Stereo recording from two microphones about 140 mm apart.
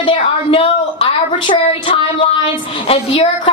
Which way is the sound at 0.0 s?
40° left (ahead or behind).